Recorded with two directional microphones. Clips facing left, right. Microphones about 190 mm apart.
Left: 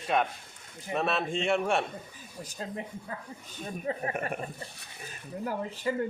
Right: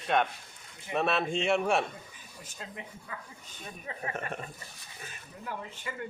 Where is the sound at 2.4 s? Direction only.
35° left (ahead or behind).